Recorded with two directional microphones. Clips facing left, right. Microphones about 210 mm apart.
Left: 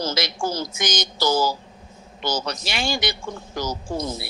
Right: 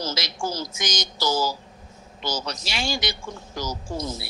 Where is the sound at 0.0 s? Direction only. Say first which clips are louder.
Left 4 dB; 55° left (ahead or behind).